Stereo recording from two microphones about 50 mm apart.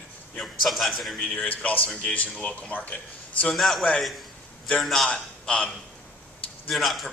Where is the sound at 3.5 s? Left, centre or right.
Centre.